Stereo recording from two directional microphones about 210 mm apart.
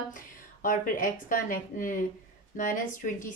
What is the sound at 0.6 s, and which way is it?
Speech, 40° left (ahead or behind).